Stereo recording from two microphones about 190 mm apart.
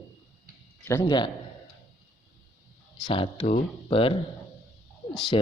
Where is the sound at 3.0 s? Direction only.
25° left (ahead or behind).